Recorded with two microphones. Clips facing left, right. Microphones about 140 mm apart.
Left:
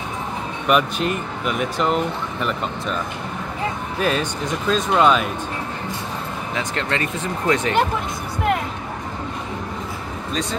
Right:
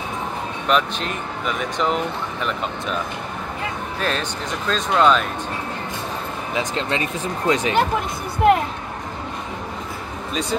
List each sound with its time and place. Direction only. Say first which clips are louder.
0.7 s speech: left 2 dB; 5° left (ahead or behind)
4.0 s speech: left 4 dB; 10° left (ahead or behind)
6.5 s speech: right 1 dB; 20° right (ahead or behind)